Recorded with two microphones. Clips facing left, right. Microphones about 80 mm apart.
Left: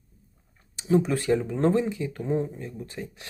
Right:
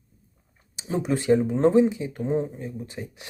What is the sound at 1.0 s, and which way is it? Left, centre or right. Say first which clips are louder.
Speech: right 3 dB; centre.